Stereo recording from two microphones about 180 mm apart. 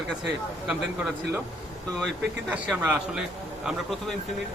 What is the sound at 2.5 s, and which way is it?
A man's voice, 10° right (ahead or behind).